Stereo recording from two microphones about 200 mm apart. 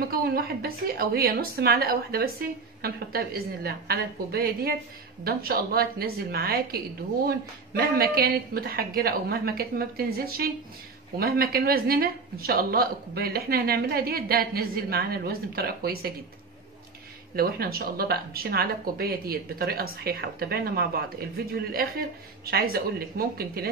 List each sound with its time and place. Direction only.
0.1 s speech: 50° right (ahead or behind)
17.4 s speech: 50° right (ahead or behind)